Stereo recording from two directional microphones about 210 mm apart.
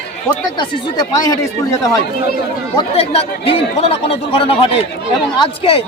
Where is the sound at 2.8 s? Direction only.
30° left (ahead or behind).